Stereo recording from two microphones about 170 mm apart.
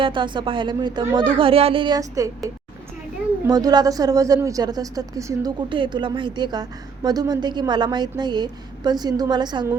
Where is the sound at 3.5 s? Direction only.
20° right (ahead or behind).